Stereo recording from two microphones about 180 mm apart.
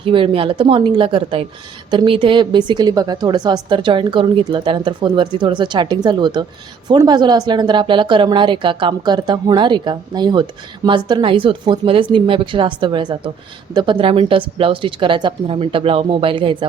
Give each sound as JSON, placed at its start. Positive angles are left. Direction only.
{"t": 0.0, "sound": "a woman's voice", "side_deg": -30}